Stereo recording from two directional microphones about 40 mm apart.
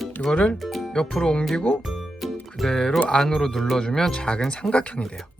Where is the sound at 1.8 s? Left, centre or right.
Centre.